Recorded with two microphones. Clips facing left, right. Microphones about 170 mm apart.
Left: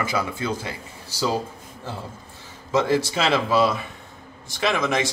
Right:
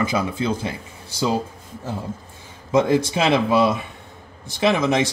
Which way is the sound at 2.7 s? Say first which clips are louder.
Right 3 dB; 20° right (ahead or behind).